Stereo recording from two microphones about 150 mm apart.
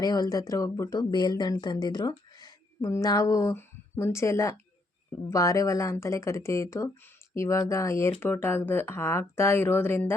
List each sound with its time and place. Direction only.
0.0 s speech: 25° left (ahead or behind)